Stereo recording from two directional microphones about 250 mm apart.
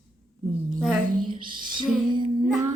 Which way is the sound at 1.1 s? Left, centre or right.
Right.